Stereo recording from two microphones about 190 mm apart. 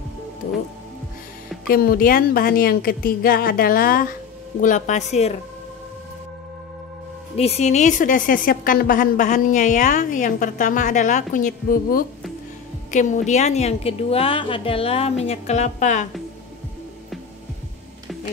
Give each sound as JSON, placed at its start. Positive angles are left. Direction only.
{"t": 1.7, "sound": "a woman's voice", "side_deg": 50}
{"t": 7.3, "sound": "a woman's voice", "side_deg": 35}